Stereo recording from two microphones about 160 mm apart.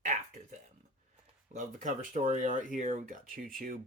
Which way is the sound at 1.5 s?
55° right (ahead or behind).